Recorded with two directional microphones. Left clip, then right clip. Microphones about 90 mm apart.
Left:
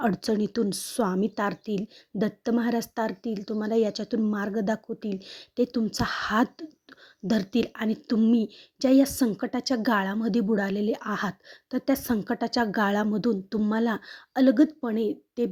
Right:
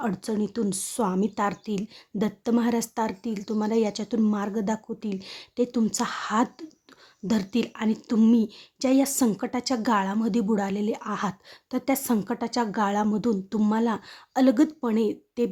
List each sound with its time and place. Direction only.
0.0 s speech: 50° left (ahead or behind)
0.7 s a woman's voice: 35° left (ahead or behind)
11.3 s a woman's voice: 25° left (ahead or behind)
12.2 s a woman's voice: 40° left (ahead or behind)
14.3 s a woman's voice: 20° left (ahead or behind)